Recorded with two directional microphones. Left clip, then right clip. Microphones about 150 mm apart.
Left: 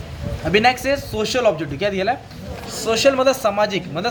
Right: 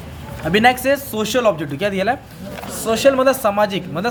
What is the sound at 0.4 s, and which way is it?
A man's voice, 35° right (ahead or behind).